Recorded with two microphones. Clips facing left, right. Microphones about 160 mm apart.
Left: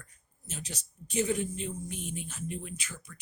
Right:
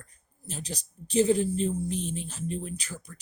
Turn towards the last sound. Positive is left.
turn(degrees=-35)  # may be behind; listen again after turning